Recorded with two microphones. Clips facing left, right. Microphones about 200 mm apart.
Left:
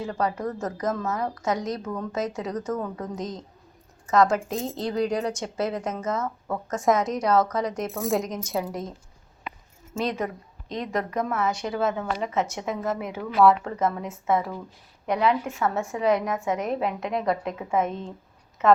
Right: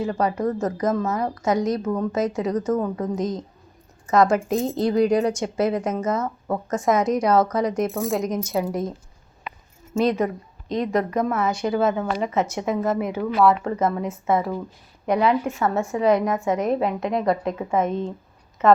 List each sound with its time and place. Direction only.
0.0 s a woman's voice: 10° right (ahead or behind)
10.0 s speech: centre (ahead or behind)